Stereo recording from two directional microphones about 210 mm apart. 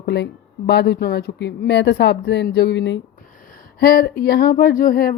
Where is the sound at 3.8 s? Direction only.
45° left (ahead or behind).